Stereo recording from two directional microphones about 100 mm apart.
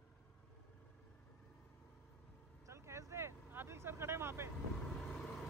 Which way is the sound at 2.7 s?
30° right (ahead or behind).